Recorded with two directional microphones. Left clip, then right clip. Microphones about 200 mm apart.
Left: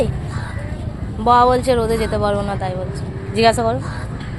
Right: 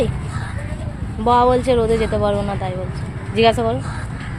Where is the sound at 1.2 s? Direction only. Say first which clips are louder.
Left 2 dB; 15° right (ahead or behind).